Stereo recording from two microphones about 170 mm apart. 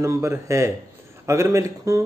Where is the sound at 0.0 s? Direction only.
15° right (ahead or behind).